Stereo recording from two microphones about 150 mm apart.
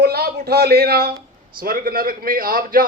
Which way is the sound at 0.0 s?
90° right.